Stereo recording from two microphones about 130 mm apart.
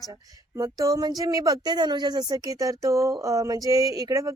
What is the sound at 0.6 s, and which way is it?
Speech, 25° right (ahead or behind).